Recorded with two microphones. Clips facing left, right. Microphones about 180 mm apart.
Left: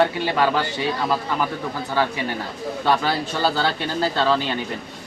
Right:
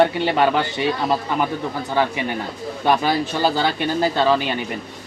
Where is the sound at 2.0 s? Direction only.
20° right (ahead or behind).